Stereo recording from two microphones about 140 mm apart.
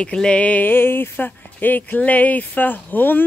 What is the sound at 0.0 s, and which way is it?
Speech, 5° left (ahead or behind).